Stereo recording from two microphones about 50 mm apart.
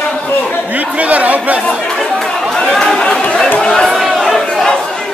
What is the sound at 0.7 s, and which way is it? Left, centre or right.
Chatter, right.